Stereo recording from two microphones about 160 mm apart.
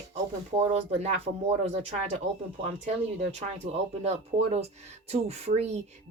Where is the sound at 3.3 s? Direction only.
45° right (ahead or behind).